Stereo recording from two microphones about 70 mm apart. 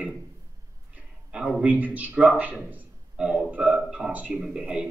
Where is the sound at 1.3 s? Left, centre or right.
Centre.